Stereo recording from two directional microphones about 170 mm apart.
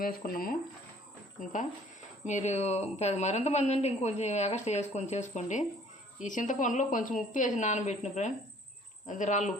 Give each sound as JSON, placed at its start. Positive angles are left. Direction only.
{"t": 0.0, "sound": "speech", "side_deg": 55}
{"t": 2.2, "sound": "a woman's voice", "side_deg": 45}